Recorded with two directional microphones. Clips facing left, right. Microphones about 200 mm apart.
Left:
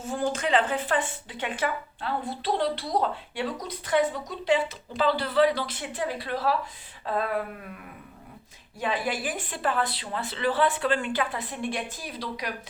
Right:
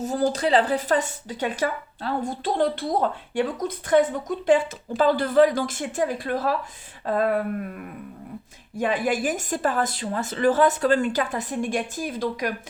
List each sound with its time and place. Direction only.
0.0 s speech: 40° right (ahead or behind)
7.0 s a sound: 45° right (ahead or behind)
8.7 s speech: 50° right (ahead or behind)